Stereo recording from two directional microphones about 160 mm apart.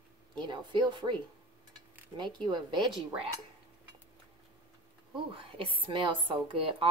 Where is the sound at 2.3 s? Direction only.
30° right (ahead or behind).